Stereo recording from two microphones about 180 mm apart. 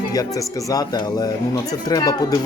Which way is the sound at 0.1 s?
20° left (ahead or behind).